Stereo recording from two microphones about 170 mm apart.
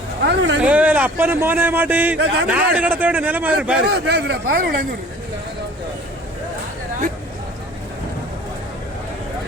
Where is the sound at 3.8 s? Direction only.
75° right (ahead or behind).